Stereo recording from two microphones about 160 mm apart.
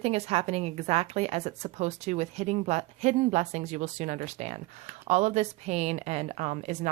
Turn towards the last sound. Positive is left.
turn(degrees=-50)  # may be behind; listen again after turning